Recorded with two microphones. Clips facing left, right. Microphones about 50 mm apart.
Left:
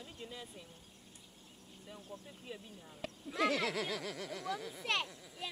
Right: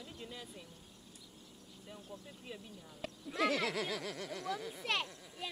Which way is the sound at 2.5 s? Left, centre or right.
Centre.